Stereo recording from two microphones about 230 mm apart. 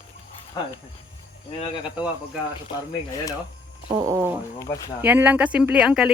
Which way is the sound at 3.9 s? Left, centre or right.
Centre.